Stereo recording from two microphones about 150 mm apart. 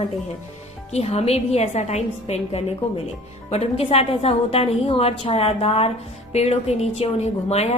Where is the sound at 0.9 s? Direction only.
45° left (ahead or behind).